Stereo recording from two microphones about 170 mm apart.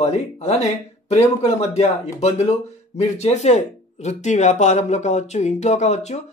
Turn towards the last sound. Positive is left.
turn(degrees=40)  # may be behind; listen again after turning